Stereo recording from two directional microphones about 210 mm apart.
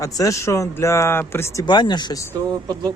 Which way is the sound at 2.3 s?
20° right (ahead or behind).